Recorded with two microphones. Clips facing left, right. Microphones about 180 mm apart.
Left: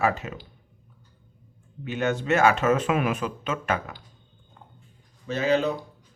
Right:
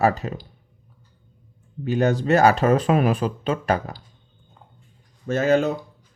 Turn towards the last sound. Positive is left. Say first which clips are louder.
# right 4 dB
turn(degrees=-45)  # may be behind; listen again after turning